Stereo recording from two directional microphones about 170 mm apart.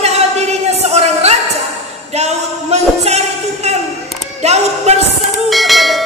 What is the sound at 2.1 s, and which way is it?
Music, 40° right (ahead or behind).